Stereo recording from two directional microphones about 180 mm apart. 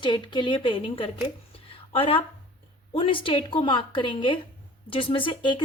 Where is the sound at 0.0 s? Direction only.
25° left (ahead or behind).